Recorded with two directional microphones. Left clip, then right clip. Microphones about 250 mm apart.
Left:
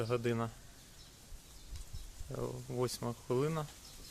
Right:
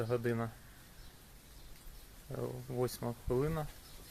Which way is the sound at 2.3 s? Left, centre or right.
Centre.